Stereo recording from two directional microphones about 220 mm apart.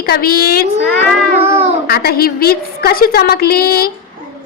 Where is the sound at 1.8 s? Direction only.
45° left (ahead or behind).